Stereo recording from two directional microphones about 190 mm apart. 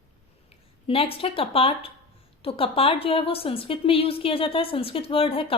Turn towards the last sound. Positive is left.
turn(degrees=30)  # may be behind; listen again after turning